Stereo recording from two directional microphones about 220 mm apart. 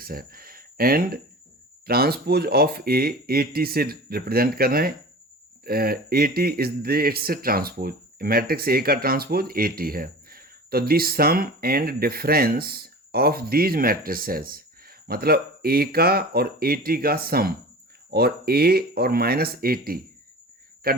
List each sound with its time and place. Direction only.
0.0 s a man's voice: 40° right (ahead or behind)